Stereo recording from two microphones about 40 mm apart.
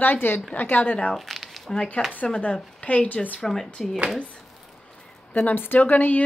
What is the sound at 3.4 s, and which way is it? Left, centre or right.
Speech, centre.